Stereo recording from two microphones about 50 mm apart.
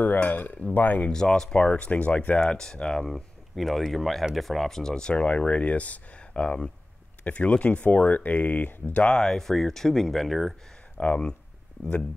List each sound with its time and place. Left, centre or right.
0.0 s speech: left
1.1 s speech: centre; by 2.4 s left
2.4 s speech: centre
3.1 s speech: centre; by 9.0 s left
9.0 s speech: centre
11.0 s speech: left